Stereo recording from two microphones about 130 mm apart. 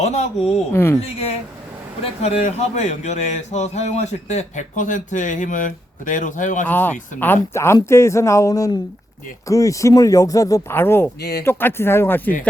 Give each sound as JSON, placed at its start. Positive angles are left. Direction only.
{"t": 0.0, "sound": "a sound", "side_deg": 60}
{"t": 0.7, "sound": "speech", "side_deg": 20}
{"t": 0.9, "sound": "a man's voice", "side_deg": 55}
{"t": 6.7, "sound": "speech", "side_deg": 15}